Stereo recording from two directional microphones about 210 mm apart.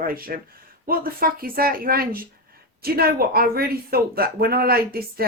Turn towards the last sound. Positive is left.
turn(degrees=-45)  # may be behind; listen again after turning